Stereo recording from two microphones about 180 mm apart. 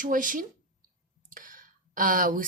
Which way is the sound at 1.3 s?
50° right (ahead or behind).